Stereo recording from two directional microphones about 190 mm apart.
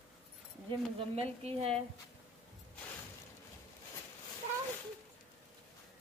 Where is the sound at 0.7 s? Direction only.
30° right (ahead or behind).